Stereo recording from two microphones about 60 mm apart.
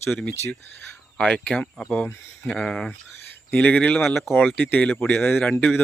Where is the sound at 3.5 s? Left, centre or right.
Left.